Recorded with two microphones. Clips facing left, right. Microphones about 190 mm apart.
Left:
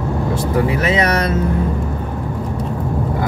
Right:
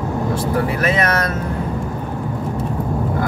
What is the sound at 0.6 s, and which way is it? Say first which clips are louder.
Speech: left 2 dB; 20° left (ahead or behind).